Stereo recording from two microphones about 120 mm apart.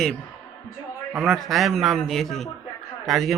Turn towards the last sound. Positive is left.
turn(degrees=0)  # may be behind; listen again after turning